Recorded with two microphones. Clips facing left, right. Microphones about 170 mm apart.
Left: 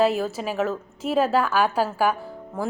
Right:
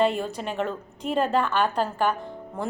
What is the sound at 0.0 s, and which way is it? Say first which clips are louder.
A woman's voice: left 2 dB; 5° left (ahead or behind).